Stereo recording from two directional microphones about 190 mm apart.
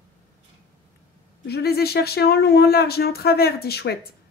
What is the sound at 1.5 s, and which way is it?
Speech, 55° left (ahead or behind).